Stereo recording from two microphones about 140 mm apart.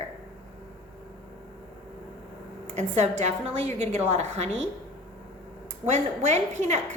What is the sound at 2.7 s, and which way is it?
A woman's voice, 55° right (ahead or behind).